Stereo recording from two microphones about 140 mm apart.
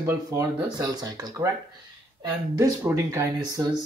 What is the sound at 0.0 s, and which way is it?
Speech, 20° right (ahead or behind).